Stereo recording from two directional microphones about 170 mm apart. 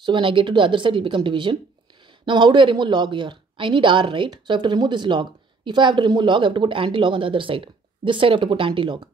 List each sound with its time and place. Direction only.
0.0 s speech: 30° right (ahead or behind)